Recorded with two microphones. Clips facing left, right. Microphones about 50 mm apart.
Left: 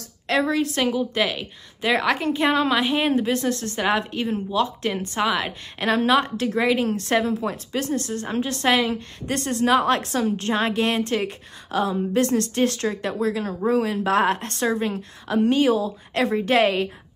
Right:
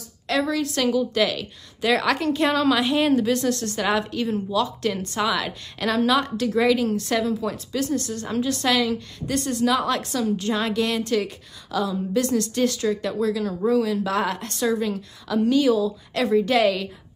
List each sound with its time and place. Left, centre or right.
0.3 s a woman's voice: left